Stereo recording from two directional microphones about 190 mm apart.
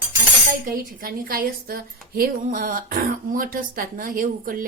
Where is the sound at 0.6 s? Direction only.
45° right (ahead or behind).